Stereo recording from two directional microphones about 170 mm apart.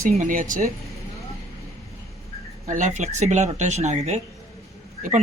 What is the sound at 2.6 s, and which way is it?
Speech, 45° right (ahead or behind).